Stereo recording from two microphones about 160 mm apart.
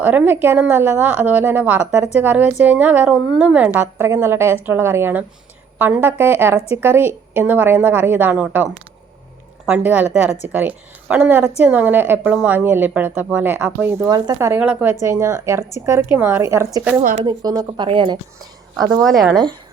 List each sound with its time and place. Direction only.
0.0 s a woman's voice: 10° right (ahead or behind)
9.6 s a woman's voice: 10° right (ahead or behind)
14.1 s a woman's voice: 20° right (ahead or behind)
17.2 s speech: 25° right (ahead or behind)
19.0 s speech: centre (ahead or behind)